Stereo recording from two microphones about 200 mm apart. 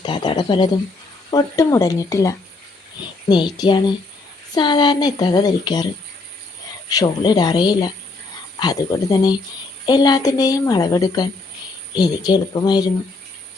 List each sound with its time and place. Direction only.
0.0 s a woman's voice: 25° left (ahead or behind)